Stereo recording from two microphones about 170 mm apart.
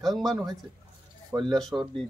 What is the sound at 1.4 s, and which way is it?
Speech, centre (ahead or behind).